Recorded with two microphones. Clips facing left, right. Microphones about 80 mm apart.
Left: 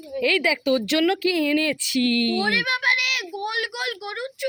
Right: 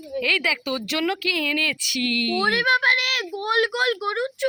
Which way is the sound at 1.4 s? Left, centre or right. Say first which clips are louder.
Left 4 dB; centre.